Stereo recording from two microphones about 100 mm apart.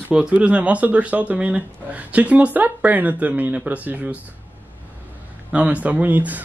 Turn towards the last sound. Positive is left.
turn(degrees=-15)  # may be behind; listen again after turning